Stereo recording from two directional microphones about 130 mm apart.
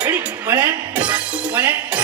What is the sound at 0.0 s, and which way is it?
Music, 15° right (ahead or behind).